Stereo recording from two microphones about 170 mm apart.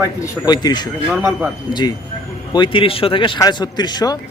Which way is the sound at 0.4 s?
25° left (ahead or behind).